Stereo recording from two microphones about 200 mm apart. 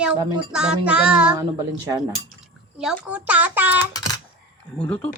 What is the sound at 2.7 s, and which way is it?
Speech, 5° right (ahead or behind).